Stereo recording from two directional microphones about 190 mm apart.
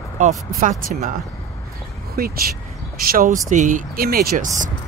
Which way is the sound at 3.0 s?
45° right (ahead or behind).